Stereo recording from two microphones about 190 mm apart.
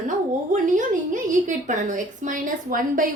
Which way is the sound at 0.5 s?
45° right (ahead or behind).